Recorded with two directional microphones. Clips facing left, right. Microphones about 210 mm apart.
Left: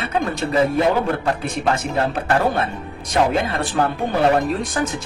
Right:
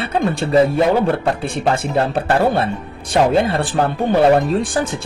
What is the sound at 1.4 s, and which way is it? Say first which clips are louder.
Speech: right 2 dB; 30° right (ahead or behind).